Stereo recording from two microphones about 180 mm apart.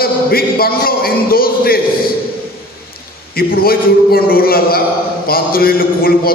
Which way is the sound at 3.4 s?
55° left (ahead or behind).